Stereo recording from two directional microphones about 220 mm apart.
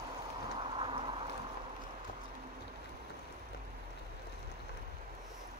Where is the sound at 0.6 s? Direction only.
25° right (ahead or behind).